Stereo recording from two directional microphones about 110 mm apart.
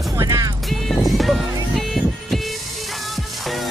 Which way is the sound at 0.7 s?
Centre (ahead or behind).